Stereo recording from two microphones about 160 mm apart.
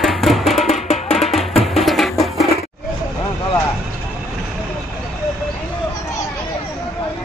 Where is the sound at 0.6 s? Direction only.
45° left (ahead or behind).